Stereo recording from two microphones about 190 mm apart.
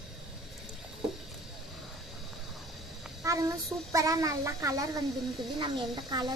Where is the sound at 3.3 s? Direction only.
15° right (ahead or behind).